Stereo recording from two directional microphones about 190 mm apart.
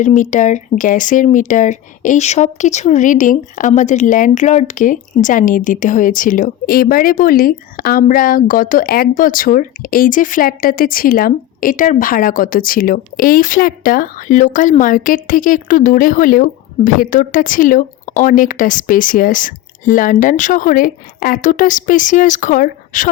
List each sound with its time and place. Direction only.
0.0 s speech: 40° left (ahead or behind)